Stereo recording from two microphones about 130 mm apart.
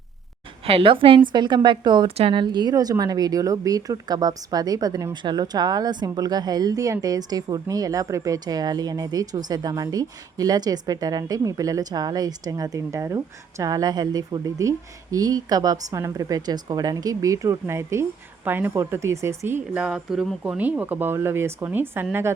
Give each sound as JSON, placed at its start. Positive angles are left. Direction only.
{"t": 0.6, "sound": "a woman's voice", "side_deg": -45}